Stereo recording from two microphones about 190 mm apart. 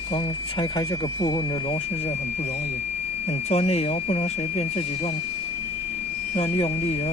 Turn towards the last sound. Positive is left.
turn(degrees=30)  # may be behind; listen again after turning